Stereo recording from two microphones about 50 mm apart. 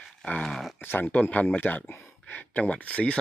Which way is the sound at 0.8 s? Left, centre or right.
Left.